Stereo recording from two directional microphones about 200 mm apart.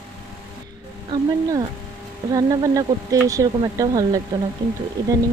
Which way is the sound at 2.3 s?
15° right (ahead or behind).